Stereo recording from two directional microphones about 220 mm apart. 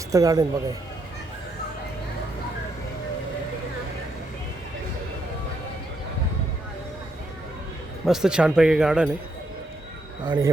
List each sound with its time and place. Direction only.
0.1 s speech: 15° right (ahead or behind)
8.0 s speech: centre (ahead or behind)
10.2 s speech: 20° right (ahead or behind)